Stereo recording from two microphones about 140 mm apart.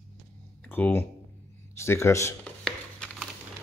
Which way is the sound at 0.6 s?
10° left (ahead or behind).